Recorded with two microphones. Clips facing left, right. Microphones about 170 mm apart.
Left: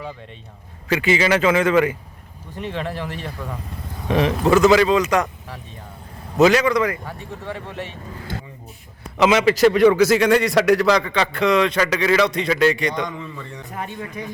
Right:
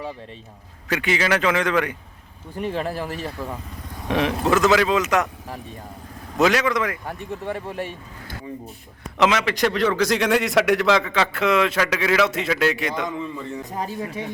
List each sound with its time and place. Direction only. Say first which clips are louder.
0.9 s a man's voice: left 4 dB; centre (ahead or behind)
2.6 s speech: right 1 dB; 40° right (ahead or behind)
3.2 s a man's voice: right 1 dB; 5° right (ahead or behind)
6.3 s a man's voice: left 4 dB; centre (ahead or behind)
7.5 s speech: right 2 dB; 45° right (ahead or behind)
9.1 s a man's voice: left 4 dB; centre (ahead or behind)
13.7 s speech: left 1 dB; 35° right (ahead or behind)
14.2 s speech: left 2 dB; 25° right (ahead or behind)